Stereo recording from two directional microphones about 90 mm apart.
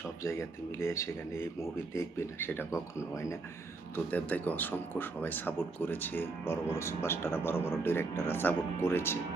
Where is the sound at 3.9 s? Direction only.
20° left (ahead or behind).